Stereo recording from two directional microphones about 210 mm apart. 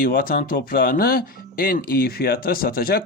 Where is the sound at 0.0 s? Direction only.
45° left (ahead or behind).